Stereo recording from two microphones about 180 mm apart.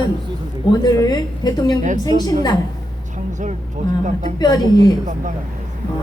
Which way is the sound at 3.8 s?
40° right (ahead or behind).